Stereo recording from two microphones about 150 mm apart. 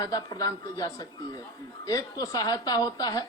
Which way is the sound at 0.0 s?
25° left (ahead or behind).